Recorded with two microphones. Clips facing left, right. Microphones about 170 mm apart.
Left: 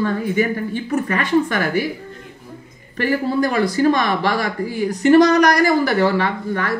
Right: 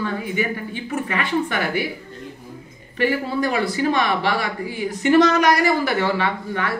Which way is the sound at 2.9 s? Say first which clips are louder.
Left 2 dB; 40° left (ahead or behind).